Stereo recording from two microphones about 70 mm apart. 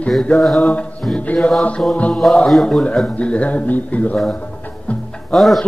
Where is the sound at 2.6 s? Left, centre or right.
Centre.